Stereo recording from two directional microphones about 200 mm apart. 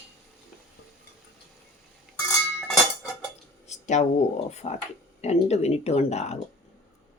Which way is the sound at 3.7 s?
35° left (ahead or behind).